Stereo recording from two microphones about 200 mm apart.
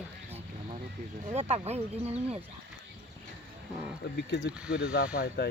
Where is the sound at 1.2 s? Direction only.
35° right (ahead or behind).